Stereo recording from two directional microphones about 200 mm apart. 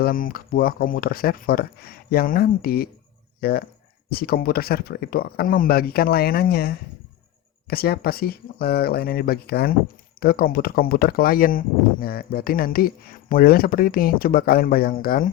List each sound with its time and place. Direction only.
0.0 s speech: 45° left (ahead or behind)
4.1 s speech: 50° left (ahead or behind)